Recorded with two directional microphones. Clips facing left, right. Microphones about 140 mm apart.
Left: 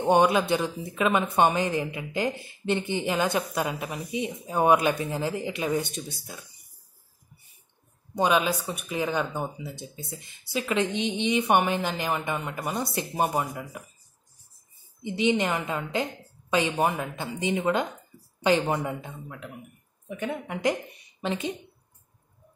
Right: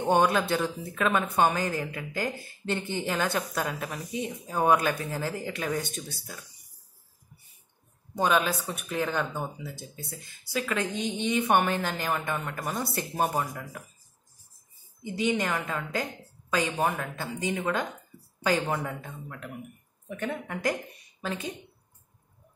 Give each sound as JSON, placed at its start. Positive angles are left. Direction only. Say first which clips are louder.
{"t": 0.0, "sound": "a woman's voice", "louder": "left 3 dB", "side_deg": 15}
{"t": 8.1, "sound": "a woman's voice", "louder": "left 2 dB", "side_deg": 15}
{"t": 15.0, "sound": "a woman's voice", "louder": "left 3 dB", "side_deg": 20}
{"t": 16.7, "sound": "a woman's voice", "louder": "left 2 dB", "side_deg": 10}
{"t": 21.2, "sound": "speech", "louder": "left 4 dB", "side_deg": 25}